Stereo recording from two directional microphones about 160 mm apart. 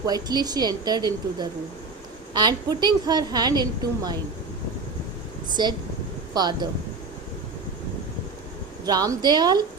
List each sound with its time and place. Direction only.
0.0 s a woman's voice: 25° right (ahead or behind)
5.6 s a woman's voice: 25° right (ahead or behind)
8.9 s a woman's voice: 25° right (ahead or behind)